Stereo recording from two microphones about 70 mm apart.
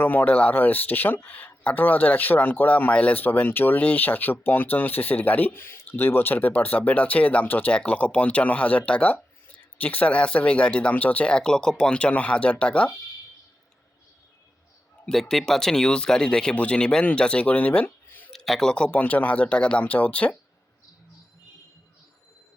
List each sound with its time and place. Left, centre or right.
0.0 s speech: left
15.1 s speech: centre; by 18.3 s left
18.3 s a sound: centre
18.9 s speech: left